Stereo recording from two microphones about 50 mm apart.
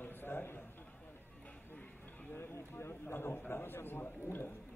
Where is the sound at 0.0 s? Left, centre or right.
Left.